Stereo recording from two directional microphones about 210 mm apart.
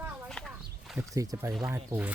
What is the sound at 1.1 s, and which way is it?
Speech, 15° right (ahead or behind).